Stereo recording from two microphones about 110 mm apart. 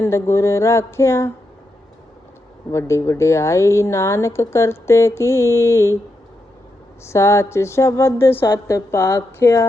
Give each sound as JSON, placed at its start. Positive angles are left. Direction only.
{"t": 0.0, "sound": "speech", "side_deg": 25}
{"t": 2.7, "sound": "speech", "side_deg": 25}
{"t": 7.0, "sound": "speech", "side_deg": 25}